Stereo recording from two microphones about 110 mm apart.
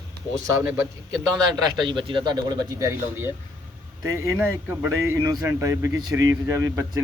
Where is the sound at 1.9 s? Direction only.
50° right (ahead or behind).